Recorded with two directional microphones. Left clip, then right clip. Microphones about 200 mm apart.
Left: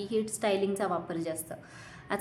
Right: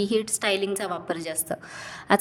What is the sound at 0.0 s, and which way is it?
A woman's voice, 45° right (ahead or behind).